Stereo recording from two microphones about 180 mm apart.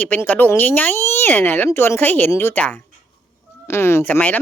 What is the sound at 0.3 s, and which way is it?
A woman's voice, 10° left (ahead or behind).